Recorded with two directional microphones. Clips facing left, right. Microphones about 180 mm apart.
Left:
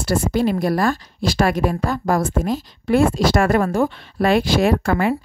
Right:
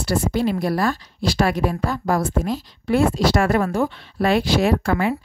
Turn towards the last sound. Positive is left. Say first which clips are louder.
# left 2 dB
turn(degrees=50)  # may be behind; listen again after turning